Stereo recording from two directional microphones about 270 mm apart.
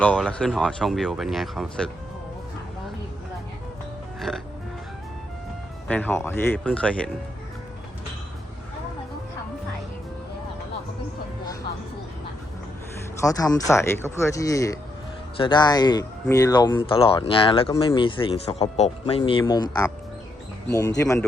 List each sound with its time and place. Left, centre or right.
0.0 s speech: centre
4.3 s music: centre
5.9 s speech: centre
13.2 s speech: centre